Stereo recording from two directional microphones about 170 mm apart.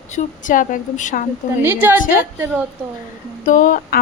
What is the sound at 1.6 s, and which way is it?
A woman's voice, 10° right (ahead or behind).